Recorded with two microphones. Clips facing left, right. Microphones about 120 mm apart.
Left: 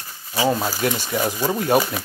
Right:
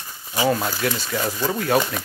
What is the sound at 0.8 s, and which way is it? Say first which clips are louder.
Speech: left 2 dB; 15° left (ahead or behind).